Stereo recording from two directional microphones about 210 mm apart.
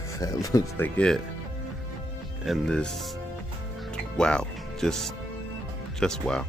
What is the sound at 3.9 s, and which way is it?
Music, 5° left (ahead or behind).